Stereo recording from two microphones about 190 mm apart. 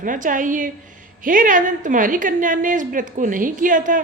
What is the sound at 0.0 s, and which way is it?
A woman's voice, 45° right (ahead or behind).